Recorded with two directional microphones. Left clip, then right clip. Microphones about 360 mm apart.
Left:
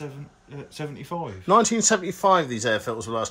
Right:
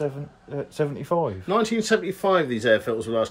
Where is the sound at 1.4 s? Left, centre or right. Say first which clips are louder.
Left 4 dB; centre.